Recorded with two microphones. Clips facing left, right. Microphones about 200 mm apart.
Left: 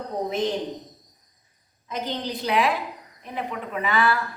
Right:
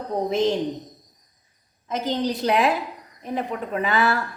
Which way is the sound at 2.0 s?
40° right (ahead or behind).